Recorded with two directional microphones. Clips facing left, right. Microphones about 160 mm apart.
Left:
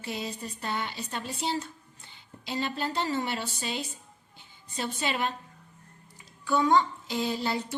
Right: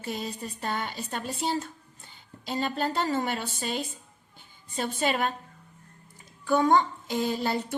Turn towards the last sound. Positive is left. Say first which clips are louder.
# right 2 dB
turn(degrees=-50)  # may be behind; listen again after turning